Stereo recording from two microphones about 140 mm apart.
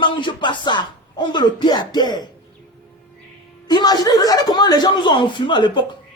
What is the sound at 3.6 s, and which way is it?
Speech, 30° left (ahead or behind).